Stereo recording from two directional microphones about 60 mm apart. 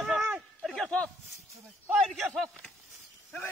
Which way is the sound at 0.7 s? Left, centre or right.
Centre.